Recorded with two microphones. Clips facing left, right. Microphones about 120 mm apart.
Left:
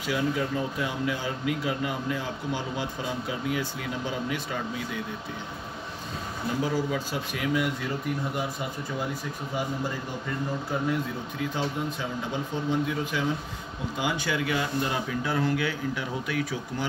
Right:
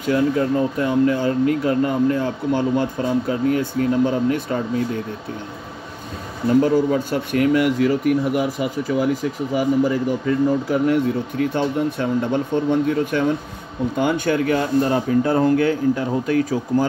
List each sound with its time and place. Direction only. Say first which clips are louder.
0.0 s speech: right 9 dB; 50° right (ahead or behind)
6.6 s speech: right 10 dB; 55° right (ahead or behind)